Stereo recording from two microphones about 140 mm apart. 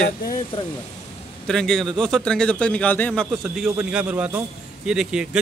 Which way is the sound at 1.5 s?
5° left (ahead or behind).